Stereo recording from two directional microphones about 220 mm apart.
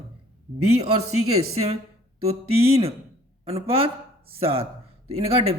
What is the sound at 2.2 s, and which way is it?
Speech, 25° right (ahead or behind).